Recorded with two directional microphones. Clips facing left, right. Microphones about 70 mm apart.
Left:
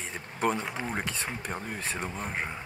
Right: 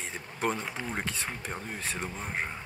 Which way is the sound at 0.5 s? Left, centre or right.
Centre.